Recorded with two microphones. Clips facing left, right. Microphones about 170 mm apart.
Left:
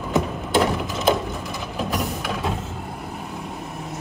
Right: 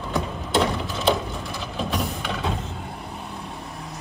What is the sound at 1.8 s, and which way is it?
Music, 5° left (ahead or behind).